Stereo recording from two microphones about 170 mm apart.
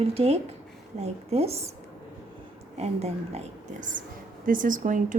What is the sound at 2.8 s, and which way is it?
A woman's voice, 40° right (ahead or behind).